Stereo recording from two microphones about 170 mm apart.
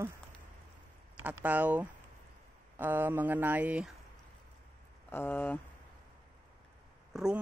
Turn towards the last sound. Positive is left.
turn(degrees=0)  # may be behind; listen again after turning